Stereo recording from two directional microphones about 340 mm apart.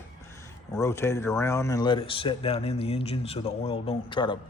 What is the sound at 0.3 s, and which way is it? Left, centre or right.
Speech, centre.